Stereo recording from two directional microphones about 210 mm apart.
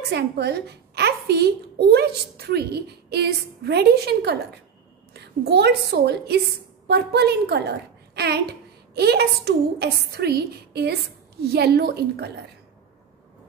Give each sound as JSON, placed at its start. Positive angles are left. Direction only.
{"t": 0.1, "sound": "a woman's voice", "side_deg": -50}